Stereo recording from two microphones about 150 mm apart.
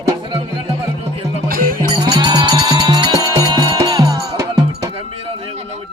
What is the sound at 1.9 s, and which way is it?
Music, 30° right (ahead or behind).